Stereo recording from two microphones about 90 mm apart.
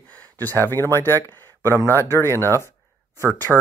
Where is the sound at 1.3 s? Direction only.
25° left (ahead or behind).